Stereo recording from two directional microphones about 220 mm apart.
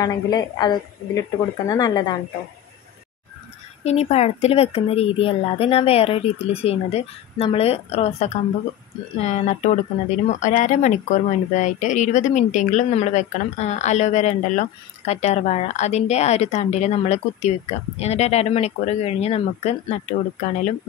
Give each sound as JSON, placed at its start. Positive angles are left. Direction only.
{"t": 0.0, "sound": "speech", "side_deg": 15}
{"t": 3.8, "sound": "a woman's voice", "side_deg": 30}